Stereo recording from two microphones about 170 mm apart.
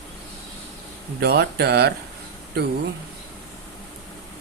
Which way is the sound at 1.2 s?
70° right (ahead or behind).